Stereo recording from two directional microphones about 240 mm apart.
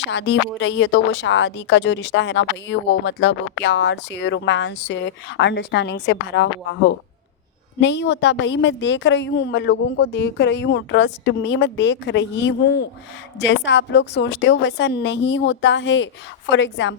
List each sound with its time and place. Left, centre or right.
0.0 s speech: left
7.8 s speech: left